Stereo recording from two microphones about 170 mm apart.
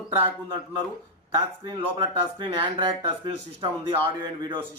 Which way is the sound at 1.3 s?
30° right (ahead or behind).